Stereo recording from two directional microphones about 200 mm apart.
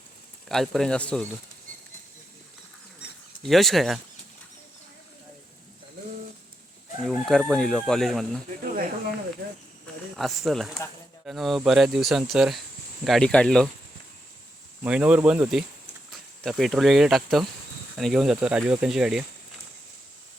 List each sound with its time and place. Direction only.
0.4 s speech: centre (ahead or behind)
3.4 s speech: centre (ahead or behind)
7.0 s speech: centre (ahead or behind)
8.4 s a sound: 45° right (ahead or behind)
10.2 s speech: centre (ahead or behind)
14.8 s speech: 5° right (ahead or behind)